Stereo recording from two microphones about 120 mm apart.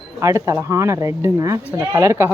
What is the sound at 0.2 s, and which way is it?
Speech, 25° right (ahead or behind).